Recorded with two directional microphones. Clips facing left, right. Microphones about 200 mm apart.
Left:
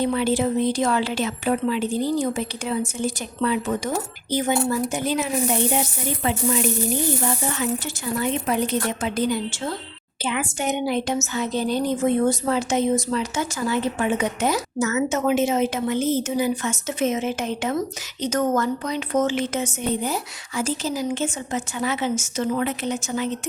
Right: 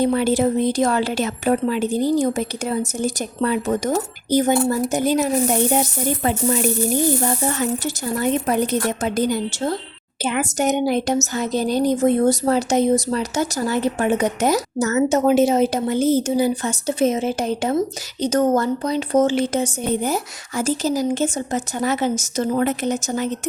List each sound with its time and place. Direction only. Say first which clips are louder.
0.0 s a woman's voice: right 4 dB; 45° right (ahead or behind)
19.9 s a woman's voice: right 3 dB; 45° right (ahead or behind)